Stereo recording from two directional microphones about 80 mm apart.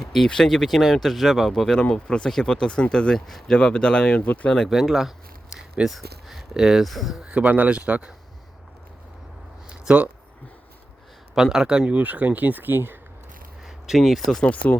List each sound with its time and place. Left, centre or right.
0.0 s speech: centre
4.7 s speech: centre
9.8 s speech: centre
11.3 s speech: centre; by 13.0 s right
13.7 s speech: centre
14.4 s speech: centre